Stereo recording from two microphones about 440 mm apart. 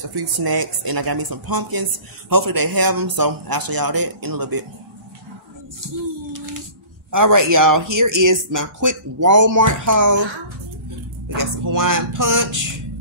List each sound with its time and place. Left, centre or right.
0.0 s speech: right
7.1 s a man's voice: right
11.2 s speech: right